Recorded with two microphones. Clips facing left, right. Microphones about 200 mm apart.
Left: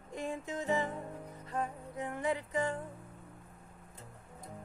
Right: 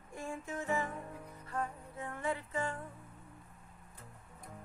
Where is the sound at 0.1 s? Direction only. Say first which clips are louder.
Left 3 dB; 20° left (ahead or behind).